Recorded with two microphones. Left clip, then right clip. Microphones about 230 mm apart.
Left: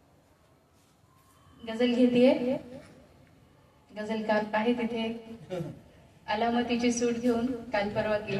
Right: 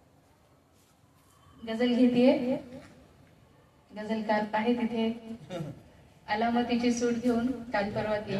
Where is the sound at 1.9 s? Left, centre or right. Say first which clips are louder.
Left 1 dB; left.